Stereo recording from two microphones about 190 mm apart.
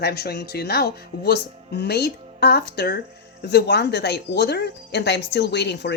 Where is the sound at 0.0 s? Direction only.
55° left (ahead or behind).